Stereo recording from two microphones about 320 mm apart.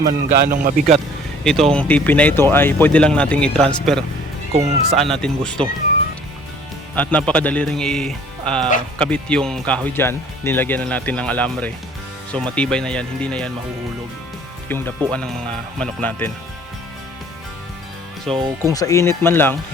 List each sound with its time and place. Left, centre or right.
0.0 s a man's voice: right
1.7 s speech: centre
4.5 s a man's voice: centre
4.9 s speech: centre
6.9 s speech: centre
14.7 s speech: centre
18.3 s speech: centre
18.7 s speech: centre